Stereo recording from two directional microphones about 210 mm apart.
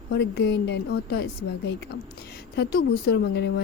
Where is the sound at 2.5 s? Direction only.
50° left (ahead or behind).